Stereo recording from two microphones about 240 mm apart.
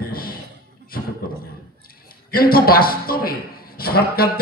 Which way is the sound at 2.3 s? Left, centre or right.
Left.